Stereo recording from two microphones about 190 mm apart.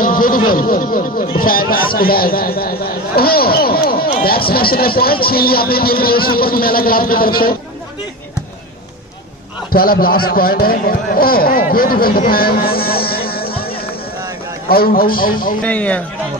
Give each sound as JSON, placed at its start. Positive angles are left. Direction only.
{"t": 0.0, "sound": "a sound", "side_deg": 45}
{"t": 0.6, "sound": "a man's voice", "side_deg": 50}
{"t": 9.7, "sound": "a man's voice", "side_deg": 50}
{"t": 15.6, "sound": "a man's voice", "side_deg": 5}